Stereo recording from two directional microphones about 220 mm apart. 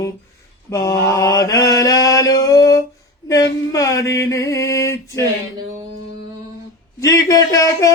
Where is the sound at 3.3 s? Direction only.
15° left (ahead or behind).